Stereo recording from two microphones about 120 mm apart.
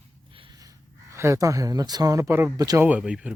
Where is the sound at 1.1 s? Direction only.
25° right (ahead or behind).